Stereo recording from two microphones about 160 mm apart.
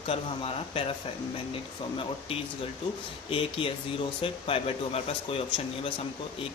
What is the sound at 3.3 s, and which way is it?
Speech, 35° left (ahead or behind).